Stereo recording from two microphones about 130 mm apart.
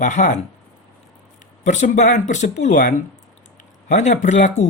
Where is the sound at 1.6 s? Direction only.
65° left (ahead or behind).